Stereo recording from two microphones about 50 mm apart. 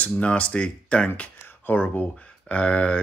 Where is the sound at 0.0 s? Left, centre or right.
Left.